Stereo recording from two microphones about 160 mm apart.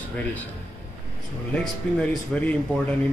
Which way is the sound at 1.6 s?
10° left (ahead or behind).